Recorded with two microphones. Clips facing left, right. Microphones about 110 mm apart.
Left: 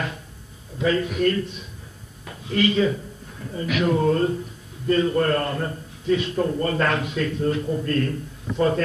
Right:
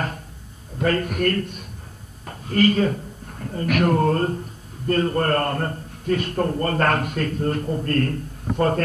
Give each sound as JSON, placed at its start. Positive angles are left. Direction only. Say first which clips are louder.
{"t": 0.7, "sound": "a man's voice", "louder": "even", "side_deg": -50}